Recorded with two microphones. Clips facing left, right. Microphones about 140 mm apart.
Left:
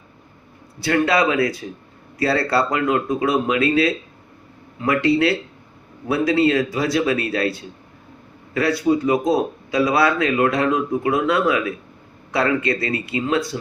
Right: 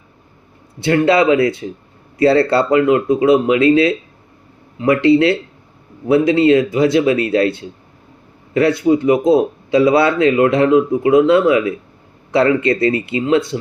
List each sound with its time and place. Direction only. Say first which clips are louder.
0.8 s speech: right 5 dB; 25° right (ahead or behind)